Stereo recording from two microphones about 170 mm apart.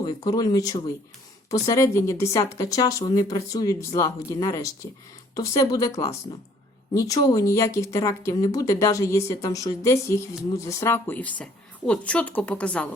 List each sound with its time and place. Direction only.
0.0 s a woman's voice: 25° left (ahead or behind); by 12.9 s 5° left (ahead or behind)